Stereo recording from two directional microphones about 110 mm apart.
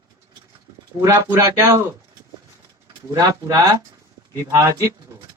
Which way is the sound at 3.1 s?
35° right (ahead or behind).